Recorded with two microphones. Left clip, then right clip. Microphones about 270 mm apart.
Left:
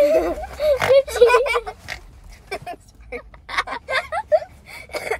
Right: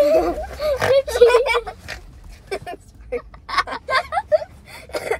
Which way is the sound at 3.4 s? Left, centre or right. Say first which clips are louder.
Right 2 dB; centre.